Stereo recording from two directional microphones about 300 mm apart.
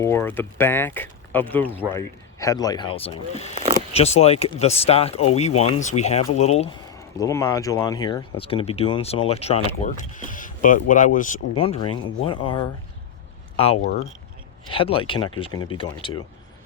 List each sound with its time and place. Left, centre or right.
0.0 s speech: centre
3.5 s speech: centre
3.9 s speech: left